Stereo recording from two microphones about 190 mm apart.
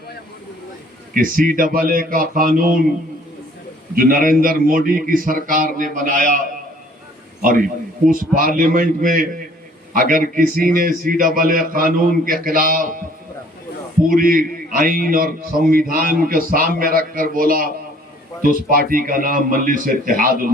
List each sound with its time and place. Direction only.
1.1 s a man's voice: 45° right (ahead or behind)
3.9 s a man's voice: 50° right (ahead or behind)
8.1 s a man's voice: 45° right (ahead or behind)
14.1 s a man's voice: 50° right (ahead or behind)